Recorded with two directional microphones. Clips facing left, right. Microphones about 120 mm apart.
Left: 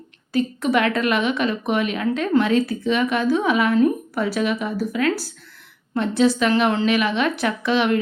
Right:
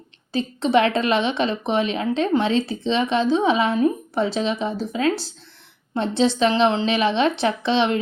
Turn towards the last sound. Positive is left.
turn(degrees=-25)  # may be behind; listen again after turning